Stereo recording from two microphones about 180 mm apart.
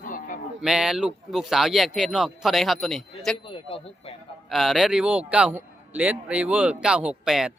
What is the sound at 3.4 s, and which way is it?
Speech, 30° left (ahead or behind).